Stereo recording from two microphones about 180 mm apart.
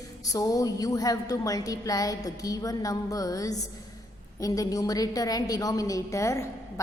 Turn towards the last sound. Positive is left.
turn(degrees=15)  # may be behind; listen again after turning